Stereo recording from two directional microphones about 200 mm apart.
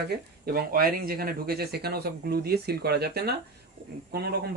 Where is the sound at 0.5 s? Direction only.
45° right (ahead or behind).